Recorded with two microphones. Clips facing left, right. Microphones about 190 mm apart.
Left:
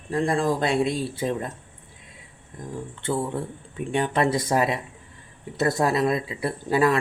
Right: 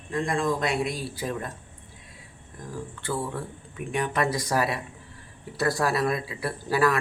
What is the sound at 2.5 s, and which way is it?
Speech, 20° left (ahead or behind).